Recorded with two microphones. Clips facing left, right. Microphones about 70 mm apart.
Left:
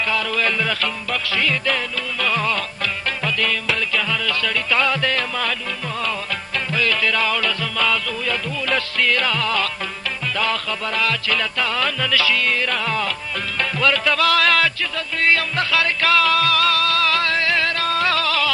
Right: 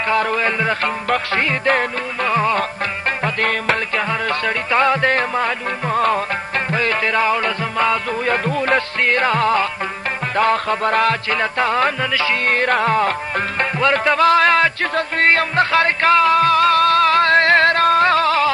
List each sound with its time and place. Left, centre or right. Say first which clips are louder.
0.1 s music: right 10 dB; right
0.3 s music: right 3 dB; right
2.3 s music: right 6 dB; right
3.2 s music: right 3 dB; right
12.4 s music: right 5 dB; right
14.8 s music: right 6 dB; right